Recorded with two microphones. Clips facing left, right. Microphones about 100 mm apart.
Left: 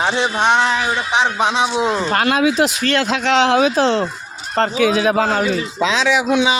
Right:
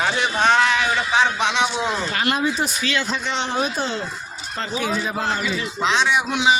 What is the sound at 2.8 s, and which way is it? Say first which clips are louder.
Speech: left 7 dB; 75° left (ahead or behind).